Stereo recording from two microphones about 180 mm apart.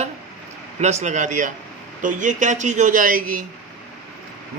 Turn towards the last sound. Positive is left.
turn(degrees=-50)  # may be behind; listen again after turning